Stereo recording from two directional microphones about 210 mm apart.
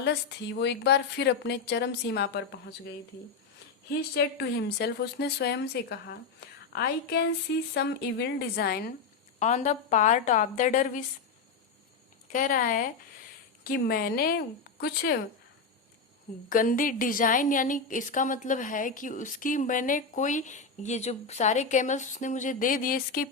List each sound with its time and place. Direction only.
0.0 s speech: 55° left (ahead or behind)
3.8 s speech: 50° left (ahead or behind)
9.4 s a woman's voice: 35° left (ahead or behind)
12.3 s a woman's voice: 40° left (ahead or behind)
16.5 s a woman's voice: 40° left (ahead or behind)